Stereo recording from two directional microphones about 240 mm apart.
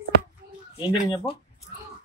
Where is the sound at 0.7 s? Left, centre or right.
Left.